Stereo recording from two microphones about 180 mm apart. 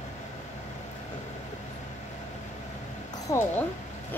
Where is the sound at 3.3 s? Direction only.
20° left (ahead or behind).